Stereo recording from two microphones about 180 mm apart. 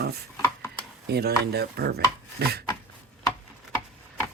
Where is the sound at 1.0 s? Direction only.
60° right (ahead or behind).